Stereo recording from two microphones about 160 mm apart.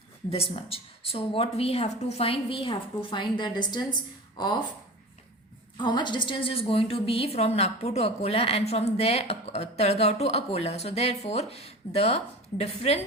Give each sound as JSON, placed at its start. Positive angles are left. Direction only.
{"t": 0.3, "sound": "a woman's voice", "side_deg": 40}
{"t": 5.7, "sound": "a woman's voice", "side_deg": 30}